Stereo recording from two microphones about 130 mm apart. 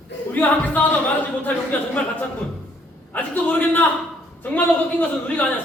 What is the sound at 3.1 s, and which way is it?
A man's voice, 10° left (ahead or behind).